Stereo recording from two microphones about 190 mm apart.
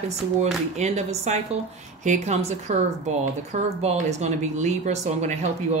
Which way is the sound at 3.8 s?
35° right (ahead or behind).